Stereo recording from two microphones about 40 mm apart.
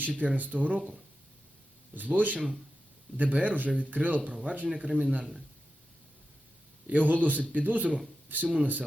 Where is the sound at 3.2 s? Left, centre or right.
Right.